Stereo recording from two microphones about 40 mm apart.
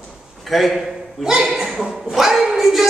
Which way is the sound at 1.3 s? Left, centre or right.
Centre.